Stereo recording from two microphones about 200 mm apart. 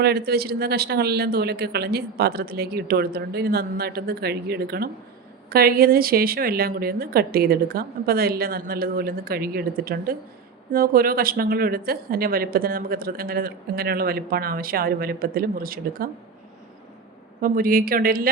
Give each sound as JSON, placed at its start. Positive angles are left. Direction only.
{"t": 0.0, "sound": "a woman's voice", "side_deg": -50}
{"t": 17.4, "sound": "a woman's voice", "side_deg": -45}